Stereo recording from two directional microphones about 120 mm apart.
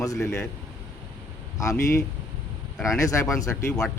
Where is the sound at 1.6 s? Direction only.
30° left (ahead or behind).